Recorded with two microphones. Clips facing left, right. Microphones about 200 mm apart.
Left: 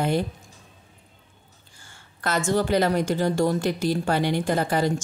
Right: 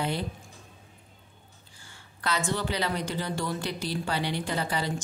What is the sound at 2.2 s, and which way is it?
A woman's voice, 45° left (ahead or behind).